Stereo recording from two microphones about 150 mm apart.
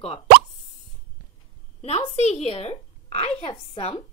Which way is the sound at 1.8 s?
45° left (ahead or behind).